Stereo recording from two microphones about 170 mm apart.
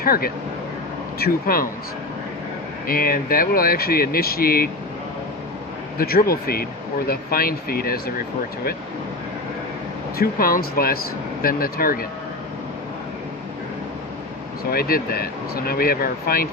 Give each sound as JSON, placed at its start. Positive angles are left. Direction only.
{"t": 0.0, "sound": "speech", "side_deg": 60}
{"t": 2.8, "sound": "speech", "side_deg": 60}
{"t": 6.0, "sound": "speech", "side_deg": 60}
{"t": 10.2, "sound": "speech", "side_deg": 60}
{"t": 14.7, "sound": "speech", "side_deg": 60}